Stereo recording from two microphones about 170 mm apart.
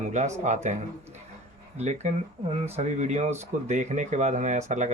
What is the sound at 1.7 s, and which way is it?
Speech, 40° right (ahead or behind).